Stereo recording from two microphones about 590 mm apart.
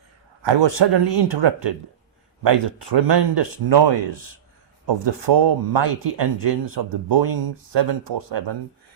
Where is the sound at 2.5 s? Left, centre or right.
Right.